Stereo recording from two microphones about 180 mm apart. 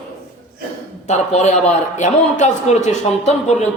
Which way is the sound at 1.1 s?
40° left (ahead or behind).